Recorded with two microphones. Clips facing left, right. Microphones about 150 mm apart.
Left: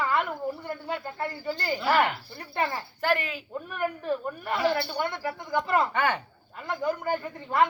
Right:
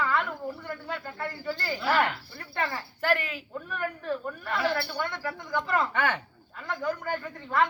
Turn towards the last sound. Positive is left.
turn(degrees=15)  # may be behind; listen again after turning